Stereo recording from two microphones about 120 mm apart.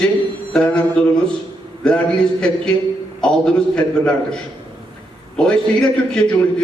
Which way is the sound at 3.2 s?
5° left (ahead or behind).